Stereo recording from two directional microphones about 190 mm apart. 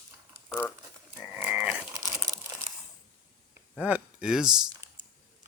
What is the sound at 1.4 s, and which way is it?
Livestock, 5° right (ahead or behind).